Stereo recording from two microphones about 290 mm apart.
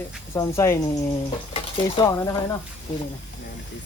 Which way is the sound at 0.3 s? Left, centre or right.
Centre.